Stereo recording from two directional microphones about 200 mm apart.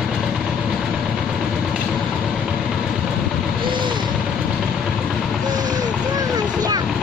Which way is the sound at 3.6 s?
25° right (ahead or behind).